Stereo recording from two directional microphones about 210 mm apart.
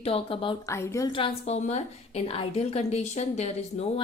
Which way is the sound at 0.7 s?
15° left (ahead or behind).